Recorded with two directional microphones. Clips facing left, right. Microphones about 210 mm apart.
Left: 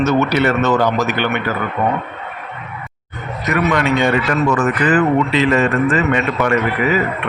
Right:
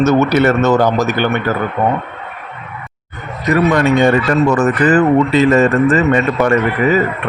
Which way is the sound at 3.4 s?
35° right (ahead or behind).